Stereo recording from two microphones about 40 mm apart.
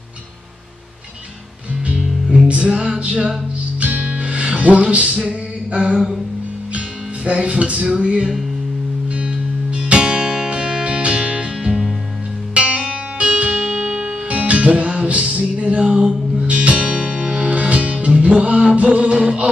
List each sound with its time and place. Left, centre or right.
2.0 s music: centre
2.4 s music: right
3.8 s music: right
7.2 s music: right
11.6 s music: centre
12.5 s music: right
19.1 s music: right